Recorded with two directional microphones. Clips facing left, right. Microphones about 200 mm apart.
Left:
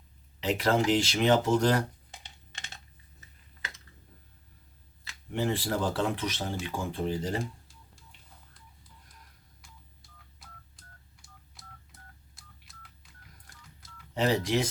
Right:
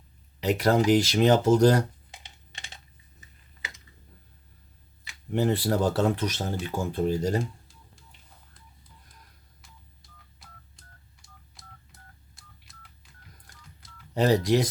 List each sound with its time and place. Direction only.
0.3 s speech: 40° right (ahead or behind)
5.3 s speech: 40° right (ahead or behind)
9.6 s telephone dialing: centre (ahead or behind)
14.1 s speech: 40° right (ahead or behind)